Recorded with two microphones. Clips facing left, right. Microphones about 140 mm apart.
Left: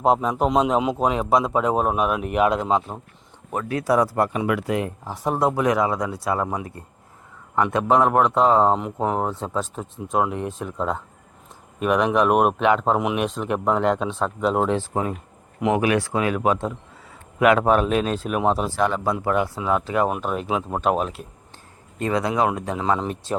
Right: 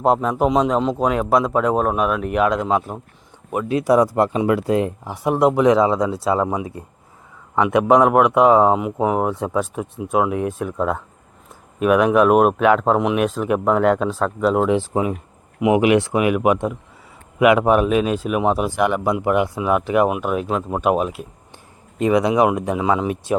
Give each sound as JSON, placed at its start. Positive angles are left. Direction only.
{"t": 0.0, "sound": "speech", "side_deg": 0}
{"t": 3.5, "sound": "speech", "side_deg": -15}
{"t": 5.0, "sound": "speech", "side_deg": -15}
{"t": 14.7, "sound": "speech", "side_deg": -15}
{"t": 20.1, "sound": "speech", "side_deg": -5}